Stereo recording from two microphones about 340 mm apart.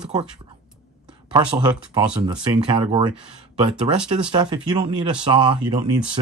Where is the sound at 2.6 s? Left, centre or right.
Centre.